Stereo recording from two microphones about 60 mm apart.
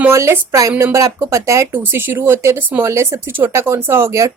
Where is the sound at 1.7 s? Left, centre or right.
Right.